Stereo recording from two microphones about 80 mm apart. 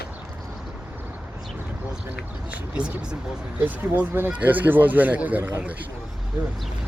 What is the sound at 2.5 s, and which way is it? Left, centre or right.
Speech, centre.